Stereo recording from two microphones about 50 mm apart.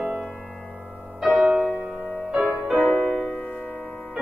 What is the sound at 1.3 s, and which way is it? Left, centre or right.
Music, centre.